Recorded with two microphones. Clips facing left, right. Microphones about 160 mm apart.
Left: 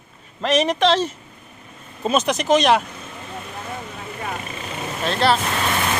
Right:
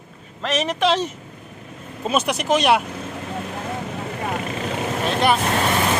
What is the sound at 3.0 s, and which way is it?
Vehicle, 70° right (ahead or behind).